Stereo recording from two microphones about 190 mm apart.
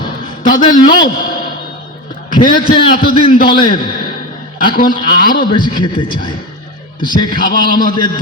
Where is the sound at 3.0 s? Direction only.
50° left (ahead or behind).